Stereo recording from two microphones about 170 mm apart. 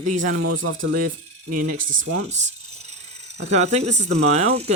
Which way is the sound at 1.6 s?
50° right (ahead or behind).